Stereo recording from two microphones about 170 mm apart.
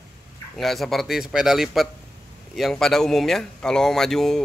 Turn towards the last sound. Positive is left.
turn(degrees=0)  # may be behind; listen again after turning